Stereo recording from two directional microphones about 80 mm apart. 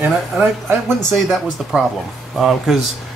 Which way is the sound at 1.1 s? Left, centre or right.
Centre.